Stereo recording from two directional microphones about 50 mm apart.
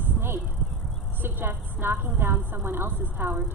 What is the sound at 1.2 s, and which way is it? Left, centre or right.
A woman's voice, right.